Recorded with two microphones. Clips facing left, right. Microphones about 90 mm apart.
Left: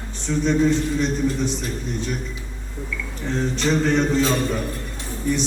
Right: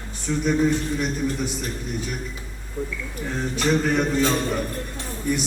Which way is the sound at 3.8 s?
5° right (ahead or behind).